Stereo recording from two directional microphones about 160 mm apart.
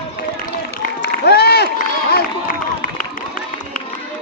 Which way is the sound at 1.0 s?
90° left.